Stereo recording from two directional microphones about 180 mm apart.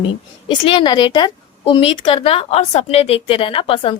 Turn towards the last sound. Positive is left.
turn(degrees=30)  # may be behind; listen again after turning